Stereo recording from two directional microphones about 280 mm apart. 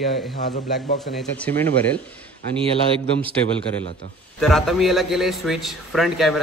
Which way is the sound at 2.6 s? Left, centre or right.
Centre.